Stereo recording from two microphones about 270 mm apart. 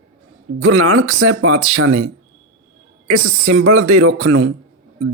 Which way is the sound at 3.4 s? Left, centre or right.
Right.